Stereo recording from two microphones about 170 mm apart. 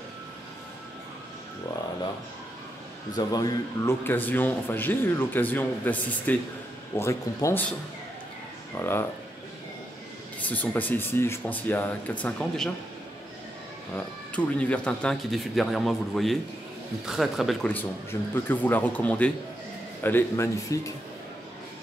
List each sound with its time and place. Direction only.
3.2 s a man's voice: 20° left (ahead or behind)
8.7 s a man's voice: 15° left (ahead or behind)
10.4 s a man's voice: 10° left (ahead or behind)
13.9 s a man's voice: 10° left (ahead or behind)